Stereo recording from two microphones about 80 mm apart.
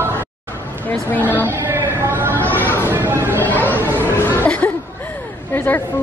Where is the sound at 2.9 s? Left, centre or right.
Right.